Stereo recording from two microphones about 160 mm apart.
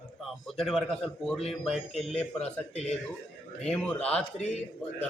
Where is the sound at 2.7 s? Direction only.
45° left (ahead or behind).